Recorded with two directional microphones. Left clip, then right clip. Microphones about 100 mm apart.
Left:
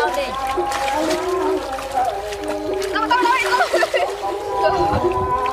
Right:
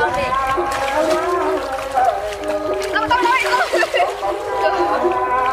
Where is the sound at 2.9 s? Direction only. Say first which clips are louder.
Right 1 dB; centre (ahead or behind).